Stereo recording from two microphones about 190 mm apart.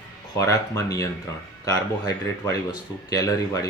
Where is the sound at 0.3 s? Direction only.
15° left (ahead or behind).